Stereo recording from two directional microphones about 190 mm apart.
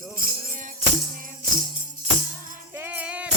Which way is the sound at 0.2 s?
45° right (ahead or behind).